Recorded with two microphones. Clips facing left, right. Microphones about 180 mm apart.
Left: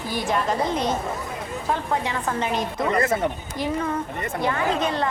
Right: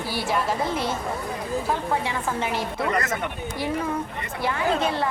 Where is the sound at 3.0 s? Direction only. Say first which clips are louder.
Left 6 dB; 30° left (ahead or behind).